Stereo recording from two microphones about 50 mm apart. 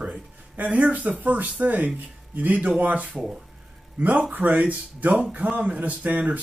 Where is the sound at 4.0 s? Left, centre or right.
Right.